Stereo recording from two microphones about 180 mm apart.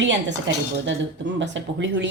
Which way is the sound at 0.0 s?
85° right.